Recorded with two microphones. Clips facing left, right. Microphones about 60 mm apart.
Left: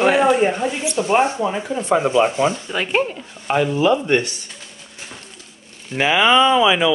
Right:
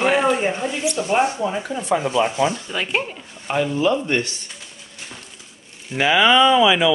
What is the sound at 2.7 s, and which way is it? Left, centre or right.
Speech, centre.